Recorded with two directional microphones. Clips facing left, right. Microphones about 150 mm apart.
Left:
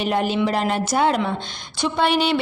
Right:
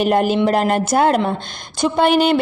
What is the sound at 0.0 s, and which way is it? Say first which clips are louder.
A woman's voice: right 5 dB; 50° right (ahead or behind).